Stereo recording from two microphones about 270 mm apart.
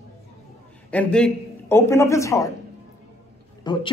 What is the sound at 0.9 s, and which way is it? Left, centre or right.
A man's voice, centre.